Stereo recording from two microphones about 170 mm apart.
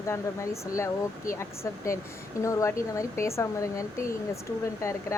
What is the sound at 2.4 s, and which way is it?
Speech, 15° left (ahead or behind).